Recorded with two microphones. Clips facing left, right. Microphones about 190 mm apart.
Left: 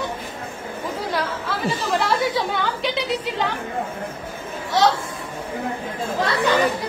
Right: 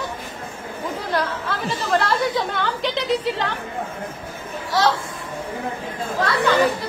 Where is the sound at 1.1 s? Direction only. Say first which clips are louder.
Right 3 dB; centre (ahead or behind).